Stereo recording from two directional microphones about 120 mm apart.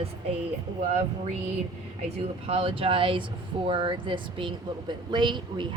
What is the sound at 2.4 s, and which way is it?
A woman's voice, 50° right (ahead or behind).